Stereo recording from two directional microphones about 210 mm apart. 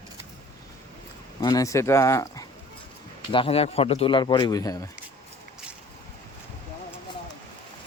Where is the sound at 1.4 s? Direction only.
15° left (ahead or behind).